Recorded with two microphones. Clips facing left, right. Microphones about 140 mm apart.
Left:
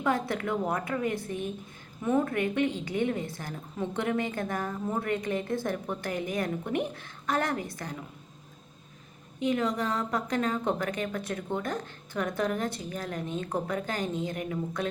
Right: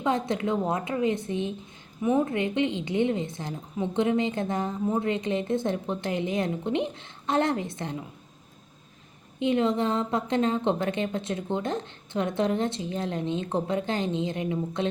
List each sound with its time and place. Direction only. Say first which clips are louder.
0.0 s a woman's voice: right 2 dB; 20° right (ahead or behind)
9.5 s a woman's voice: right 4 dB; 25° right (ahead or behind)